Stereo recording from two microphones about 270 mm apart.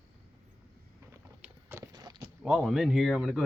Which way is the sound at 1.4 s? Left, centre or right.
Centre.